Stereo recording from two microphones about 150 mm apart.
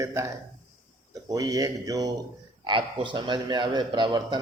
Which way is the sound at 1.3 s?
25° right (ahead or behind).